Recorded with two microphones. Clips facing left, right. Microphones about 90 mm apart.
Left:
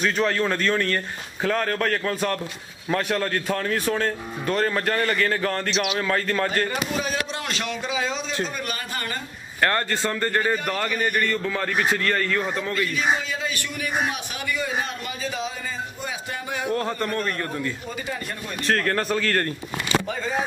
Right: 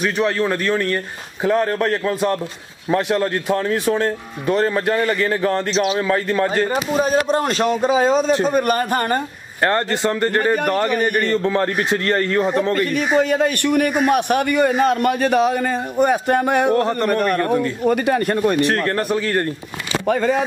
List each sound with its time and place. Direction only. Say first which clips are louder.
0.0 s speech: right 3 dB; 15° right (ahead or behind)
5.7 s speech: right 6 dB; 35° right (ahead or behind)
5.9 s speech: right 5 dB; 20° right (ahead or behind)
6.7 s a man's voice: right 9 dB; 40° right (ahead or behind)
9.6 s speech: right 5 dB; 20° right (ahead or behind)
10.4 s a man's voice: right 7 dB; 55° right (ahead or behind)
11.1 s speech: right 7 dB; 25° right (ahead or behind)
12.7 s a man's voice: right 6 dB; 55° right (ahead or behind)
18.7 s speech: right 3 dB; 20° right (ahead or behind)
20.1 s a man's voice: right 9 dB; 60° right (ahead or behind)